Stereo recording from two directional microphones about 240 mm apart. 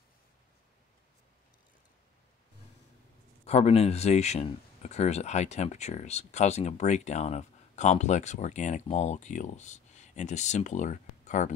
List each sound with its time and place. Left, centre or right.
3.4 s speech: left